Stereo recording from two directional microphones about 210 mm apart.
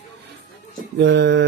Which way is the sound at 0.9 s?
55° right (ahead or behind).